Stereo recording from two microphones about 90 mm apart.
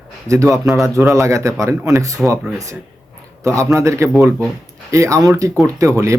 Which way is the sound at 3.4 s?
35° right (ahead or behind).